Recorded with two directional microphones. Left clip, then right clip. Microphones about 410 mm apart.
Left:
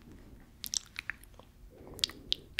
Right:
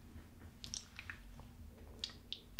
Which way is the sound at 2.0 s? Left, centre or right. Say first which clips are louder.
Left 13 dB; left.